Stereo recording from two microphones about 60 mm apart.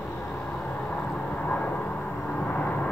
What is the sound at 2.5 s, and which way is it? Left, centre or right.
Vehicle, left.